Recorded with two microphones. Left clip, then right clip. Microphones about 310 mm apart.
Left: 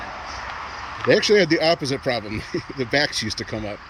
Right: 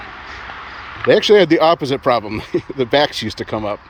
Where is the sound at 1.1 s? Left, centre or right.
Centre.